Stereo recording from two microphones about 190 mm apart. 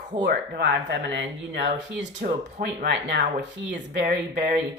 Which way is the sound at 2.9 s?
65° right (ahead or behind).